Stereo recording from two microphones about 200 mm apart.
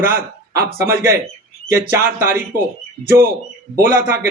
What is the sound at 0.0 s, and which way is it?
Speech, 45° right (ahead or behind).